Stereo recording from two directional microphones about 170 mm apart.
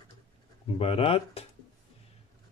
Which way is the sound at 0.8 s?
35° left (ahead or behind).